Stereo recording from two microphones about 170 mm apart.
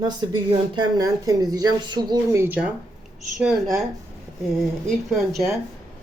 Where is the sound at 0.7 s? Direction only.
25° right (ahead or behind).